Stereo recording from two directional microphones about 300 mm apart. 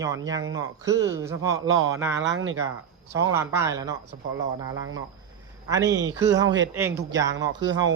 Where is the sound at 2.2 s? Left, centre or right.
Right.